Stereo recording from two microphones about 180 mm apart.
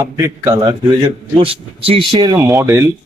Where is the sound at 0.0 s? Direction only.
20° right (ahead or behind).